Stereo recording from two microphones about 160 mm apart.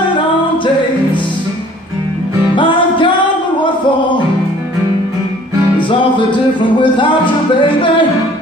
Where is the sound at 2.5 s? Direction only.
30° left (ahead or behind).